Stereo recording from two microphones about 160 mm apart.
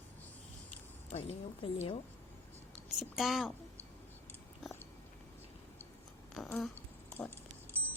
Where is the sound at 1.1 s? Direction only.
35° left (ahead or behind).